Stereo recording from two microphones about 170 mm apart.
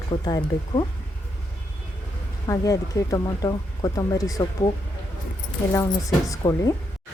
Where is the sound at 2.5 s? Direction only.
20° left (ahead or behind).